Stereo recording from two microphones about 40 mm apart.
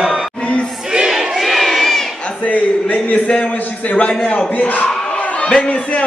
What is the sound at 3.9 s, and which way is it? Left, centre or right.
Speech, left.